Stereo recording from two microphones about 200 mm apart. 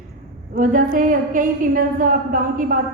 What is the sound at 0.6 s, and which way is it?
A woman's voice, 45° right (ahead or behind).